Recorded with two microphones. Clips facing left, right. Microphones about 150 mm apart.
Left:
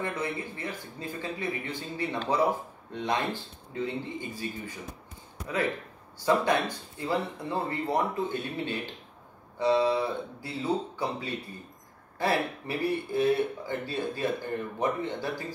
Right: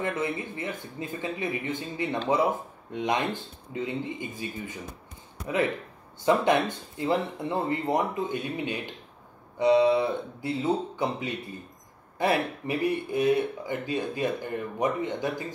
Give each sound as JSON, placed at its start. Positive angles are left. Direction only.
{"t": 0.0, "sound": "speech", "side_deg": -20}
{"t": 6.2, "sound": "speech", "side_deg": -20}